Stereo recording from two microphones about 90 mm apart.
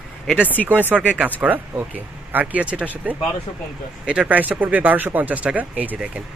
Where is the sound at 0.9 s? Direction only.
Centre (ahead or behind).